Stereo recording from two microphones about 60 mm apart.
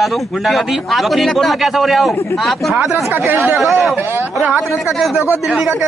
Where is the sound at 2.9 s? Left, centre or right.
Right.